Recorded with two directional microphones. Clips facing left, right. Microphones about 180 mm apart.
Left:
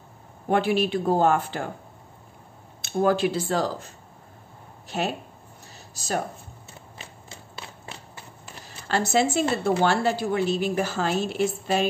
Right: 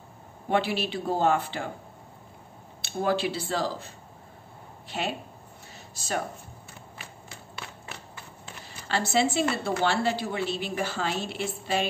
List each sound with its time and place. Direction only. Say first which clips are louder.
0.5 s a woman's voice: left 4 dB; 50° left (ahead or behind)
2.8 s a woman's voice: left 5 dB; 50° left (ahead or behind)
7.0 s typewriter: left 2 dB; 30° left (ahead or behind)
8.6 s zipper: left 4 dB; 45° left (ahead or behind)
9.8 s a woman's voice: left 4 dB; 45° left (ahead or behind)